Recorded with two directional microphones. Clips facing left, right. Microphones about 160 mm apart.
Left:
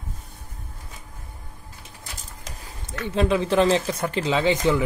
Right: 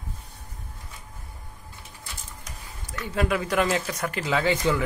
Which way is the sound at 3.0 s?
25° left (ahead or behind).